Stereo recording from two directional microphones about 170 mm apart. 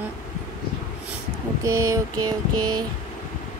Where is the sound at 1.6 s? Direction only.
20° right (ahead or behind).